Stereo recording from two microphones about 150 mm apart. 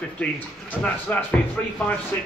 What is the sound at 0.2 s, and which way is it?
Speech, 10° left (ahead or behind).